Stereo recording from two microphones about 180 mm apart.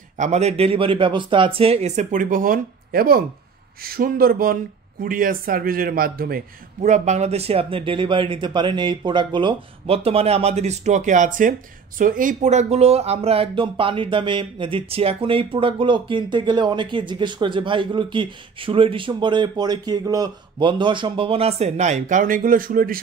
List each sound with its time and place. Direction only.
0.2 s a man's voice: 40° right (ahead or behind); by 6.4 s 55° right (ahead or behind)
6.8 s speech: 40° right (ahead or behind)